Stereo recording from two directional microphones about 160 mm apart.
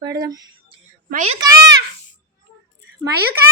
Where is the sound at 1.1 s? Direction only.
45° right (ahead or behind).